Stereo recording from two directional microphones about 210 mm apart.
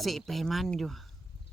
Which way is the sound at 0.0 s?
Centre (ahead or behind).